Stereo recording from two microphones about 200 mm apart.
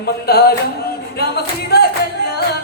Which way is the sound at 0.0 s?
50° left (ahead or behind).